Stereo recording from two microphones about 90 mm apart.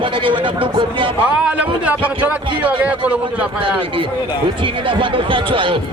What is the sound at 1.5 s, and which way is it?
Speech, 15° right (ahead or behind).